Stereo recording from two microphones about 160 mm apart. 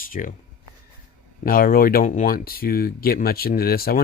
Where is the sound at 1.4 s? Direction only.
65° left (ahead or behind).